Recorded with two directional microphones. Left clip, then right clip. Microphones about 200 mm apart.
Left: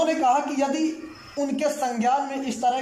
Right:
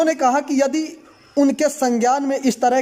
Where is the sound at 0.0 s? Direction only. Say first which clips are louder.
Right 4 dB; 35° right (ahead or behind).